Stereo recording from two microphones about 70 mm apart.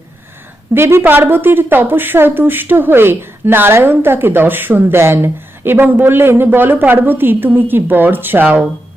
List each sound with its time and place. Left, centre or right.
0.7 s a woman's voice: right